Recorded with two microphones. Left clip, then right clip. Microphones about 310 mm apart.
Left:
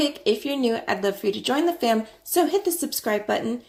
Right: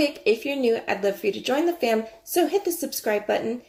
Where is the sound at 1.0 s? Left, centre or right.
Left.